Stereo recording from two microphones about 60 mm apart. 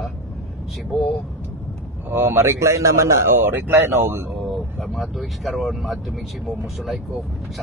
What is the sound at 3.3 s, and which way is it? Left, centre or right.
Speech, right.